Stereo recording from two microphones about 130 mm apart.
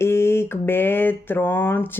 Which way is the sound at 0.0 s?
20° left (ahead or behind).